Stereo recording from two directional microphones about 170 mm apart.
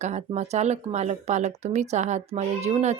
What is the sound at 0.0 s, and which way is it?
Speech, 40° right (ahead or behind).